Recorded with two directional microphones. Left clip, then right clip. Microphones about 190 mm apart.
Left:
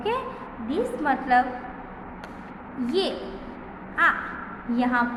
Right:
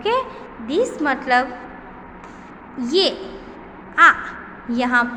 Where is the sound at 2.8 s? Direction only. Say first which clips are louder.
Right 7 dB; 30° right (ahead or behind).